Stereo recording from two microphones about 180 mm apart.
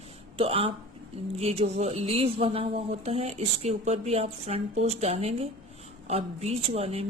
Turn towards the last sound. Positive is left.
turn(degrees=-35)  # may be behind; listen again after turning